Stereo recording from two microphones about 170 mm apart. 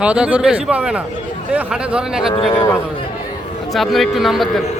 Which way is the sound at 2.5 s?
20° left (ahead or behind).